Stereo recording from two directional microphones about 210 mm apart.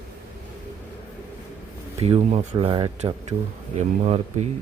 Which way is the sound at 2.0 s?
30° right (ahead or behind).